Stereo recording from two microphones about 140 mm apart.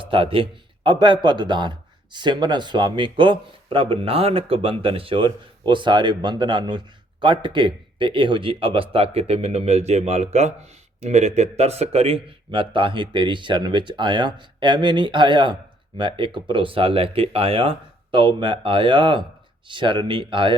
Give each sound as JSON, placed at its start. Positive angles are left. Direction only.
{"t": 0.0, "sound": "a man's voice", "side_deg": -40}